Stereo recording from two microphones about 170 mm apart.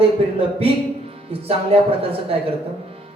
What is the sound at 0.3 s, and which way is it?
Speech, 35° right (ahead or behind).